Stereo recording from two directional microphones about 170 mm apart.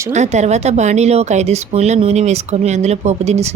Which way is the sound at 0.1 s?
40° right (ahead or behind).